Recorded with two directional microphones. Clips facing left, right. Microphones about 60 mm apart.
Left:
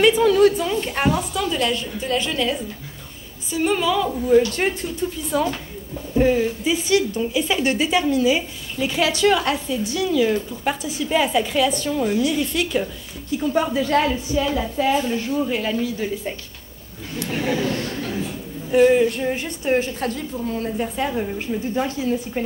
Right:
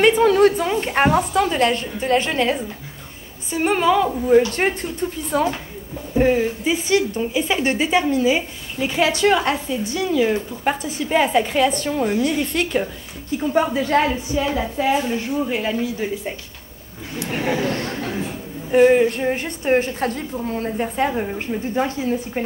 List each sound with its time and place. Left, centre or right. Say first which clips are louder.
0.0 s speech: right 1 dB; right
18.7 s speech: right 1 dB; right